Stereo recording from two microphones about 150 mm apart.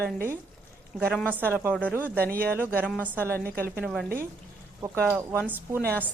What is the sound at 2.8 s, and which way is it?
Speech, 10° left (ahead or behind).